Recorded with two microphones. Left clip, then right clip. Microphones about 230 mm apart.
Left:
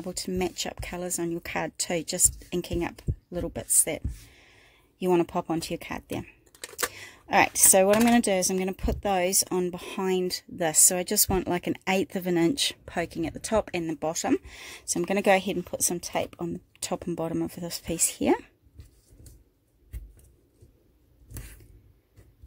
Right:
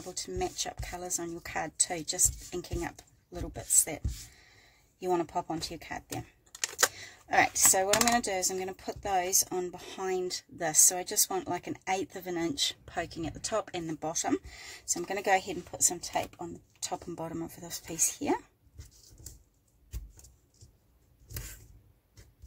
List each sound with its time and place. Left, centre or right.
0.2 s speech: left